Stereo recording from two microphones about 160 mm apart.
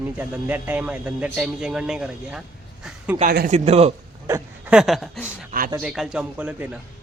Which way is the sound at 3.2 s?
60° right (ahead or behind).